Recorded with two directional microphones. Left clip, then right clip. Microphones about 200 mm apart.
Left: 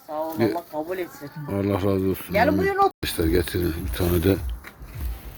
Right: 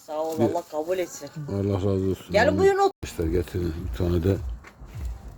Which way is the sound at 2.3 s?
55° right (ahead or behind).